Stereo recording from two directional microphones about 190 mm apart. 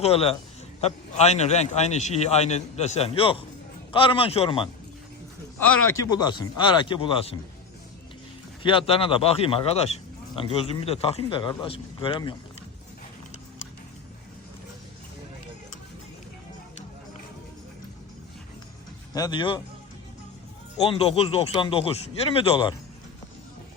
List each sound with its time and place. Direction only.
0.0 s a man's voice: 30° left (ahead or behind)
6.0 s speech: 20° left (ahead or behind)
8.6 s speech: 25° left (ahead or behind)
19.1 s speech: 20° left (ahead or behind)
20.8 s speech: 30° left (ahead or behind)